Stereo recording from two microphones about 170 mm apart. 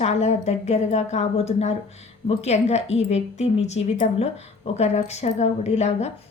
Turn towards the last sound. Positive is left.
turn(degrees=40)  # may be behind; listen again after turning